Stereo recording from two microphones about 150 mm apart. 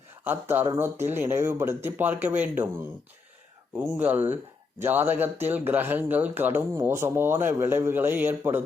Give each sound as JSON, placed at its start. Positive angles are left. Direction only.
{"t": 0.3, "sound": "a man's voice", "side_deg": -15}
{"t": 3.8, "sound": "a man's voice", "side_deg": -10}